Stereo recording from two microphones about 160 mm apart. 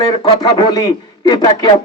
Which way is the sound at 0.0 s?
25° left (ahead or behind).